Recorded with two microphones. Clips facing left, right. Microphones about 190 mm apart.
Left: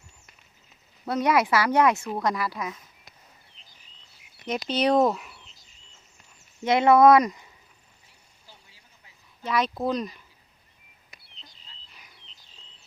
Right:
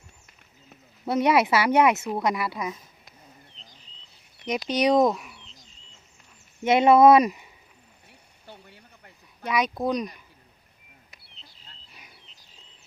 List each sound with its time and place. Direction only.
1.0 s speech: 25° right (ahead or behind)
2.1 s speech: 10° right (ahead or behind)
2.4 s speech: 20° right (ahead or behind)
3.6 s bird: 10° left (ahead or behind)
4.4 s speech: 15° right (ahead or behind)
5.0 s bird: centre (ahead or behind)
6.6 s speech: 20° right (ahead or behind)
8.4 s a sound: 60° right (ahead or behind)
9.5 s speech: 15° right (ahead or behind)
11.3 s a sound: centre (ahead or behind)